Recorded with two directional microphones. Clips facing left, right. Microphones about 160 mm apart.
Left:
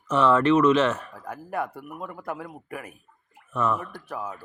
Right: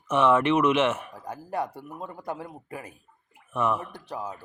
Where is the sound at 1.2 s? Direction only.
30° right (ahead or behind).